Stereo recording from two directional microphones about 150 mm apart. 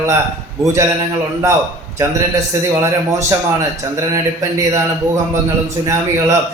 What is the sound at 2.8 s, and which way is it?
A man's voice, 20° right (ahead or behind).